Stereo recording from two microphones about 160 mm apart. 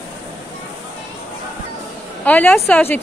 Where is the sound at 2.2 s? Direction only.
10° left (ahead or behind).